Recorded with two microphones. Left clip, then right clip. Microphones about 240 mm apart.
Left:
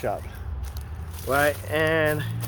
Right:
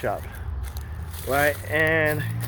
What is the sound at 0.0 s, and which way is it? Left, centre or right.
Squish, centre.